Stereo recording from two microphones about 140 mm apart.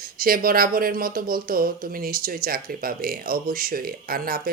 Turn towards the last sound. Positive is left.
turn(degrees=-90)